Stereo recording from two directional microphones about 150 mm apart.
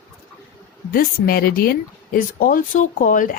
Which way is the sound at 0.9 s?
80° left.